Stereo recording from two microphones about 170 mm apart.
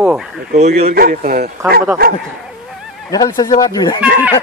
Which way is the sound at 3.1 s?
20° left (ahead or behind).